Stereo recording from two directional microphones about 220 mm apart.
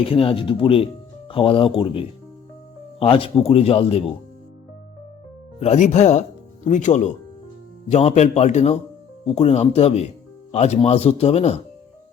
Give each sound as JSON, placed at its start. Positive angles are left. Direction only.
{"t": 0.0, "sound": "speech", "side_deg": 25}
{"t": 5.5, "sound": "speech", "side_deg": 30}